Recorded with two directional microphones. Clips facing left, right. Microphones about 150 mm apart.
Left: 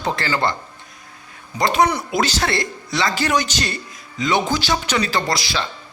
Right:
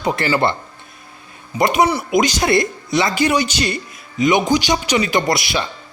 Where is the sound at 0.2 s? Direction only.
20° right (ahead or behind).